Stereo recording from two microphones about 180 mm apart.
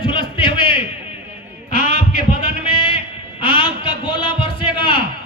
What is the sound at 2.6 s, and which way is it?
Music, 30° left (ahead or behind).